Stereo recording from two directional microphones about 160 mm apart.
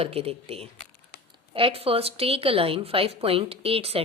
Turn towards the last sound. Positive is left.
turn(degrees=-35)  # may be behind; listen again after turning